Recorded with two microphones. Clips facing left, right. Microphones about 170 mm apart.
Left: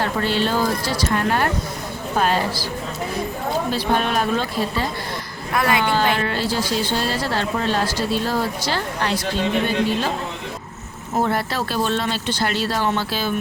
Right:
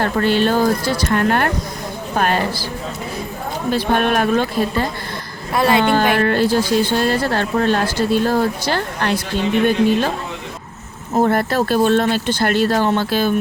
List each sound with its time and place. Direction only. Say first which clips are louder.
0.0 s speech: right 5 dB; 55° right (ahead or behind)
3.7 s speech: right 7 dB; 55° right (ahead or behind)
5.5 s a woman's voice: right 5 dB; 25° right (ahead or behind)
5.9 s speech: right 5 dB; 55° right (ahead or behind)
11.2 s speech: right 6 dB; 50° right (ahead or behind)